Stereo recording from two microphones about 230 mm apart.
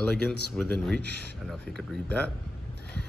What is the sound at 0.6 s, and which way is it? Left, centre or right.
Speech, centre.